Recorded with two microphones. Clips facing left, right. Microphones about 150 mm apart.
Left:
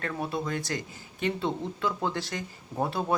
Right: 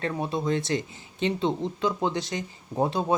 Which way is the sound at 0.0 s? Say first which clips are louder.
Right 4 dB; 20° right (ahead or behind).